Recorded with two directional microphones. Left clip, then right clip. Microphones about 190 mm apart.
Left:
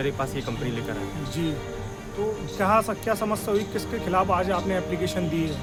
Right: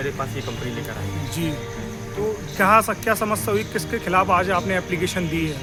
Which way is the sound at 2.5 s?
35° right (ahead or behind).